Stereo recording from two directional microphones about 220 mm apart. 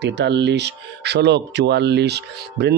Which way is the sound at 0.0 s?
50° right (ahead or behind).